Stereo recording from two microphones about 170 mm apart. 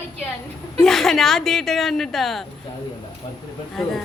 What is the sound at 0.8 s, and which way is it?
A woman's voice, centre (ahead or behind).